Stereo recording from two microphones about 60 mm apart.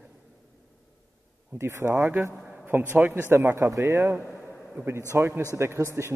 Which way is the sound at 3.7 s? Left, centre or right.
Right.